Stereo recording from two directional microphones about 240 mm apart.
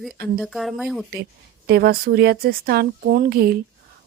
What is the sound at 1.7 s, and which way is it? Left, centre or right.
Speech, right.